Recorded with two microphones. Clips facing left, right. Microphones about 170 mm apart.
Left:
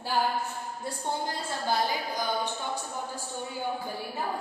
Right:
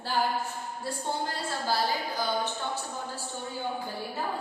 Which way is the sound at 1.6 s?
15° left (ahead or behind).